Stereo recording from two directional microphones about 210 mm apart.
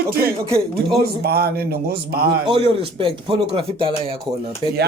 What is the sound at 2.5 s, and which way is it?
Speech, 25° right (ahead or behind).